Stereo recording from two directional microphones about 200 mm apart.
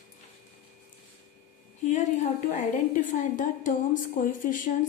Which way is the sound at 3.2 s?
40° left (ahead or behind).